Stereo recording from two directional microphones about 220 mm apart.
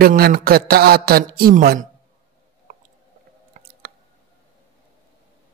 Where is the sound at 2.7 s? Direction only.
40° right (ahead or behind).